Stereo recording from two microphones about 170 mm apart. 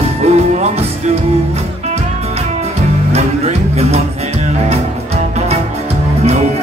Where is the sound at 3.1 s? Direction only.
40° right (ahead or behind).